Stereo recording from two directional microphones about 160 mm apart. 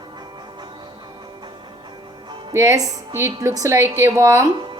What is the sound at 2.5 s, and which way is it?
Speech, 20° right (ahead or behind).